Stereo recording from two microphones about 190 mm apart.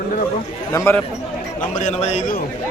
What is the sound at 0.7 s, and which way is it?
Speech, 15° left (ahead or behind).